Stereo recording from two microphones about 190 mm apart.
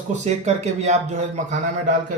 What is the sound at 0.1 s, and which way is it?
Speech, 35° right (ahead or behind).